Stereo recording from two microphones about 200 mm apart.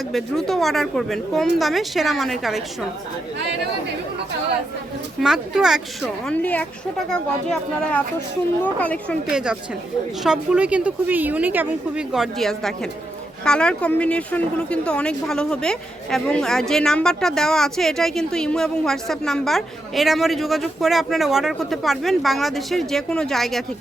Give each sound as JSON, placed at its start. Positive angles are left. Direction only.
{"t": 0.1, "sound": "speech", "side_deg": 0}
{"t": 5.2, "sound": "speech", "side_deg": 0}
{"t": 9.3, "sound": "speech", "side_deg": -5}